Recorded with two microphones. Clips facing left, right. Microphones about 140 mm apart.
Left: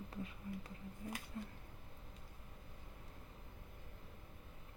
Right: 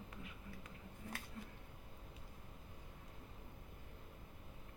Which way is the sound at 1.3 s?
40° left (ahead or behind).